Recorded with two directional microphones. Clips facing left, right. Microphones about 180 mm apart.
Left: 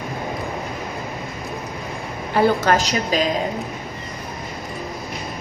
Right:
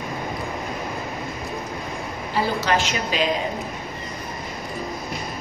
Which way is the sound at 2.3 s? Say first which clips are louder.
Left 7 dB; 55° left (ahead or behind).